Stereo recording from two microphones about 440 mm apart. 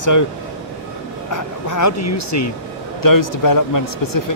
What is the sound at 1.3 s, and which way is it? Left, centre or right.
Speech, left.